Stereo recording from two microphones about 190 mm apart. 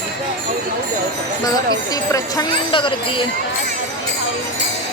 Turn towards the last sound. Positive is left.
turn(degrees=25)  # may be behind; listen again after turning